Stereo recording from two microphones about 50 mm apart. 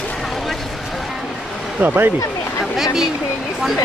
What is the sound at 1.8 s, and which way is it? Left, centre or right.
Speech, right.